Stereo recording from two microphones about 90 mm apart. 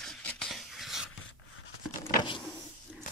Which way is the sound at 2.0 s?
65° left (ahead or behind).